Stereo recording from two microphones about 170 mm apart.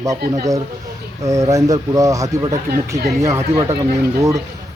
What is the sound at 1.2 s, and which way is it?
A man's voice, 20° right (ahead or behind).